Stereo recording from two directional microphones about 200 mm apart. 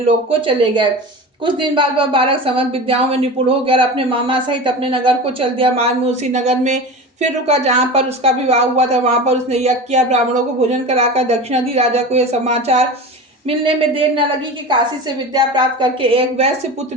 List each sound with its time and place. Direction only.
0.3 s a woman's voice: 25° right (ahead or behind)